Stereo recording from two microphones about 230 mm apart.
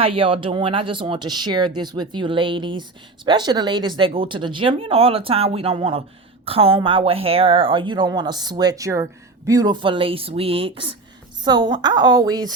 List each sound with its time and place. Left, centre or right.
0.0 s speech: right